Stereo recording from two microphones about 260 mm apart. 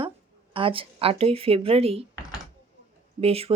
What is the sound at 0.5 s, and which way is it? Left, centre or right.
Speech, centre.